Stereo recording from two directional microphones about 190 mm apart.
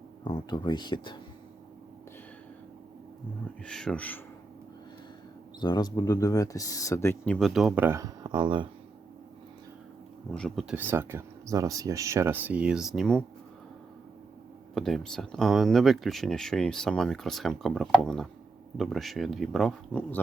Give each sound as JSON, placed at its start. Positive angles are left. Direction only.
{"t": 0.3, "sound": "speech", "side_deg": 25}
{"t": 3.7, "sound": "speech", "side_deg": 5}
{"t": 5.5, "sound": "speech", "side_deg": 20}
{"t": 7.3, "sound": "speech", "side_deg": 0}
{"t": 10.3, "sound": "speech", "side_deg": 0}
{"t": 14.8, "sound": "speech", "side_deg": 0}